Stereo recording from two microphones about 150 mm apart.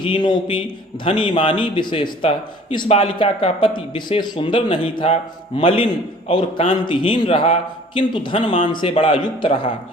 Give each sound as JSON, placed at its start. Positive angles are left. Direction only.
{"t": 0.0, "sound": "speech", "side_deg": 30}